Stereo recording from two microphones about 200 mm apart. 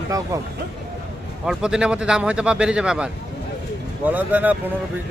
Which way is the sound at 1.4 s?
5° right (ahead or behind).